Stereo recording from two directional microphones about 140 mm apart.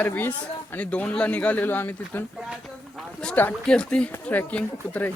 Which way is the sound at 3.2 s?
10° left (ahead or behind).